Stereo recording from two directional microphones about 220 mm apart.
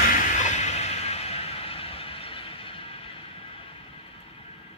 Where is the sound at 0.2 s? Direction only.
35° left (ahead or behind).